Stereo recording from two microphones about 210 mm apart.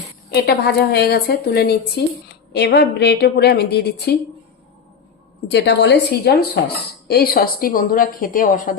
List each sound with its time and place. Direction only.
0.4 s a woman's voice: 50° left (ahead or behind)
5.5 s a woman's voice: 55° left (ahead or behind); by 8.7 s 40° left (ahead or behind)